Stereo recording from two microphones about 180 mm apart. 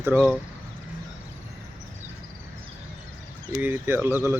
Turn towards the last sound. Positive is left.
turn(degrees=-10)  # may be behind; listen again after turning